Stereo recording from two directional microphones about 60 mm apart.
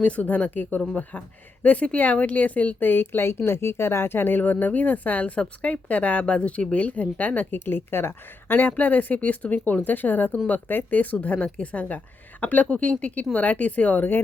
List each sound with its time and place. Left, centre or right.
0.0 s speech: left